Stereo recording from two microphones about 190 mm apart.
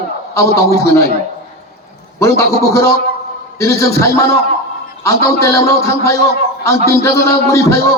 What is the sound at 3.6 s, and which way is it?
A man's voice, 15° left (ahead or behind).